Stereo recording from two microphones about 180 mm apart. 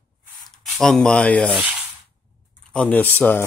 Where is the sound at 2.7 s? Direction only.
10° left (ahead or behind).